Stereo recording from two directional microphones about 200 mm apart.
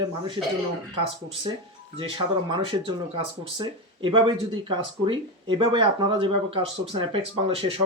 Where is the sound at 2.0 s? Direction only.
25° right (ahead or behind).